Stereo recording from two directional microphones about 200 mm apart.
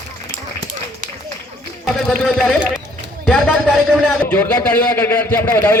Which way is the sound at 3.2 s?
Centre (ahead or behind).